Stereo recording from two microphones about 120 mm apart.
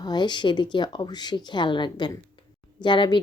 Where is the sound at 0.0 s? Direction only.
40° left (ahead or behind).